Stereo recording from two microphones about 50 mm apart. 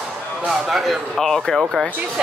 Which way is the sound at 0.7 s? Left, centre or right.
Centre.